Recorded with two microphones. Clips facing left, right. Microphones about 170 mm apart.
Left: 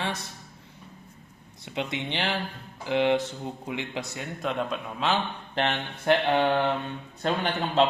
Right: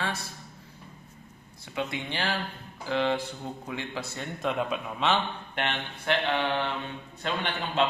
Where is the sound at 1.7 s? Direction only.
20° left (ahead or behind).